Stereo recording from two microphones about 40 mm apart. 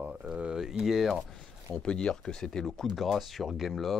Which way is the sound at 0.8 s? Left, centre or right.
Centre.